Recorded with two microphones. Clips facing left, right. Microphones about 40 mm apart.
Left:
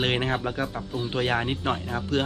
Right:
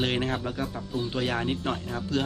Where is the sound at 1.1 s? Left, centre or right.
Left.